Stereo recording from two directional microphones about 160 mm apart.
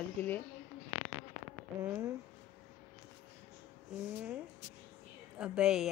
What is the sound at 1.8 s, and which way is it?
Speech, 15° right (ahead or behind).